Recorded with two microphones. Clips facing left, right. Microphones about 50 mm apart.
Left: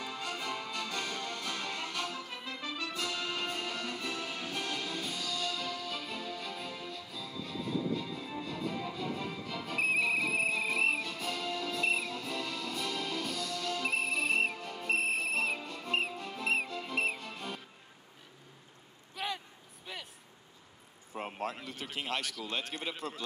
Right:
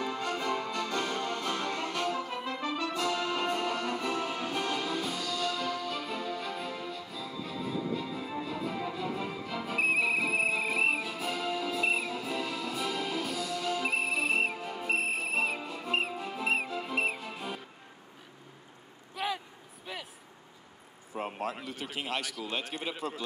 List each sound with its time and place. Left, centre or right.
0.2 s music: centre
19.1 s a sound: centre
19.9 s vehicle: centre
21.1 s a man's voice: centre